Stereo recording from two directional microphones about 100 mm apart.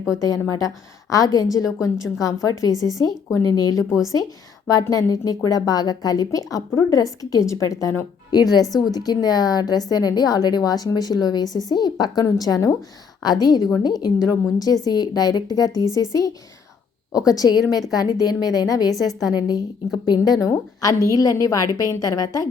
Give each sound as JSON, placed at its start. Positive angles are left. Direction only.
{"t": 0.2, "sound": "speech", "side_deg": 35}
{"t": 18.9, "sound": "a woman's voice", "side_deg": 0}
{"t": 19.3, "sound": "a woman's voice", "side_deg": 45}